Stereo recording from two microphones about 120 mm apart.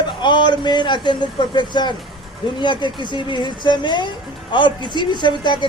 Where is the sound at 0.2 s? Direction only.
40° left (ahead or behind).